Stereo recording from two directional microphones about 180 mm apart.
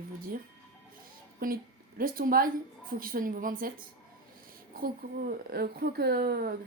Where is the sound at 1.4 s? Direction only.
55° right (ahead or behind).